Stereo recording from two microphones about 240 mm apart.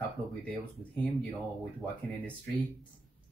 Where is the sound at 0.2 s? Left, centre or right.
Right.